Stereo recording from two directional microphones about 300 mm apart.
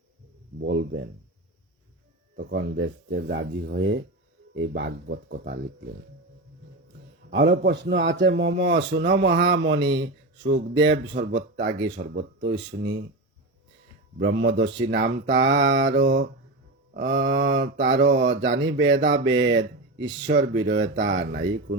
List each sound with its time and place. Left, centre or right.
0.6 s speech: right
2.3 s speech: right
7.3 s speech: right
14.2 s speech: right